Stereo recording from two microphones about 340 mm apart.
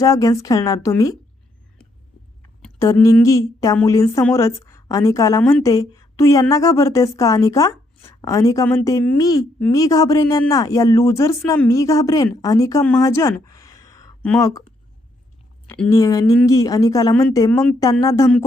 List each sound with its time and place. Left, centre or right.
0.0 s speech: centre
2.6 s speech: centre
15.6 s speech: centre